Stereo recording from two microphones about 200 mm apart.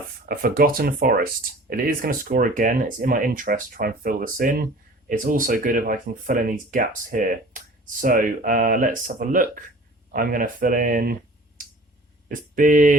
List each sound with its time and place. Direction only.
0.3 s speech: 45° right (ahead or behind)
12.3 s speech: 40° right (ahead or behind)